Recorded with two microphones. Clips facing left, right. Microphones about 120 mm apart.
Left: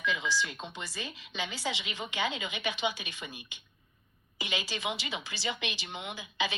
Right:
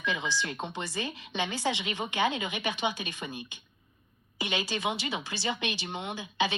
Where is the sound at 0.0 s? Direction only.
65° right (ahead or behind); by 3.4 s 45° right (ahead or behind).